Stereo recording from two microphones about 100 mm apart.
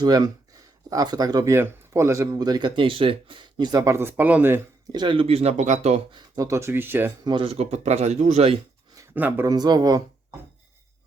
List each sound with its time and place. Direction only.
0.0 s speech: 40° right (ahead or behind)
1.5 s speech: 25° right (ahead or behind); by 3.8 s 45° right (ahead or behind)
3.8 s speech: 25° right (ahead or behind)
4.9 s speech: 45° right (ahead or behind)
5.1 s speech: 80° right
6.3 s speech: 35° right (ahead or behind)
7.3 s speech: 55° right (ahead or behind)
7.5 s speech: 90° right
9.1 s speech: 20° right (ahead or behind)
9.5 s speech: 40° right (ahead or behind)